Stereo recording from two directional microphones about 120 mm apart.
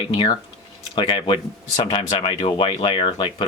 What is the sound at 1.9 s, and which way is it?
Speech, 55° left (ahead or behind).